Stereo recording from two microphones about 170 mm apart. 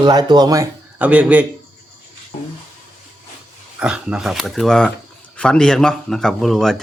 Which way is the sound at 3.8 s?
5° right (ahead or behind).